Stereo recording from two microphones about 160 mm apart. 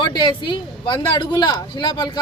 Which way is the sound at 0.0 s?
30° left (ahead or behind).